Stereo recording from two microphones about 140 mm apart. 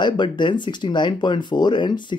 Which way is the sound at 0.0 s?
35° left (ahead or behind).